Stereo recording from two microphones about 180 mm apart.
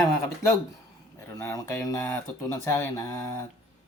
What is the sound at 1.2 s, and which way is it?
Speech, 15° left (ahead or behind).